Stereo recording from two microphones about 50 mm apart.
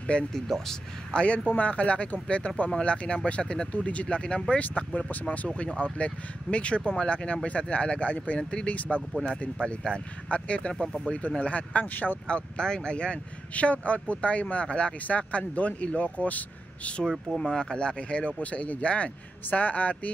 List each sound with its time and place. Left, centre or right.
0.3 s speech: centre
1.1 s speech: left
8.7 s speech: left
10.7 s speech: centre
11.1 s speech: left
12.3 s speech: centre
17.4 s speech: centre